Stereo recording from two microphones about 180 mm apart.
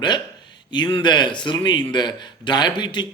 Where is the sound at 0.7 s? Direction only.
25° left (ahead or behind).